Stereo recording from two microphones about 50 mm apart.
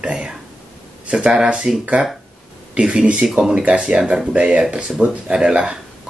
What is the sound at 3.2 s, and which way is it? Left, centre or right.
Speech, centre.